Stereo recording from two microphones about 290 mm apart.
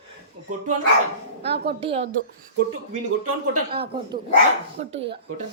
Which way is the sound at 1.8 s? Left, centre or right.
Centre.